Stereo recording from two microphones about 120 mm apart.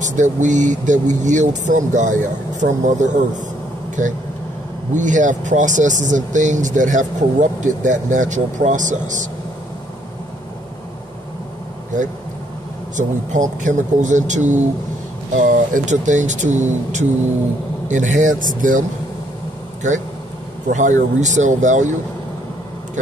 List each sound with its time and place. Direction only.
0.0 s speech: 90° right
12.9 s speech: 90° right
20.6 s speech: 90° right